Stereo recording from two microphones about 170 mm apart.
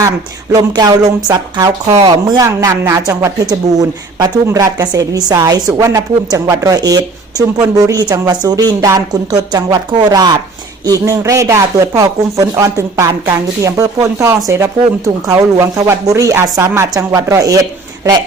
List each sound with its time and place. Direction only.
0.5 s a woman's voice: 20° right (ahead or behind)